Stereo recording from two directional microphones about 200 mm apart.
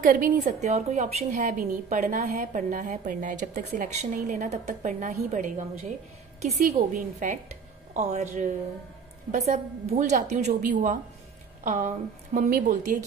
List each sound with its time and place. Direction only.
0.0 s a woman's voice: 45° right (ahead or behind)